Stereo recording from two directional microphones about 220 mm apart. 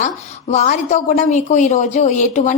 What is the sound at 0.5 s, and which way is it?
Speech, 35° left (ahead or behind).